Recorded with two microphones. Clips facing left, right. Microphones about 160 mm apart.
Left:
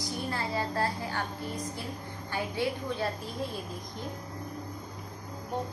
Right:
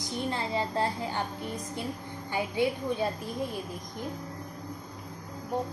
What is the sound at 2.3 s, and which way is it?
Speech, 15° right (ahead or behind).